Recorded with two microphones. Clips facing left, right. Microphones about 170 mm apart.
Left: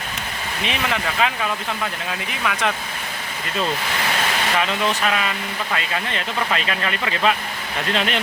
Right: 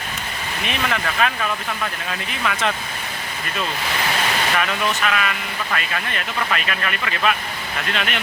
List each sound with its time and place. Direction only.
0.6 s speech: 20° left (ahead or behind)
2.4 s speech: 5° left (ahead or behind)
4.5 s speech: 25° left (ahead or behind)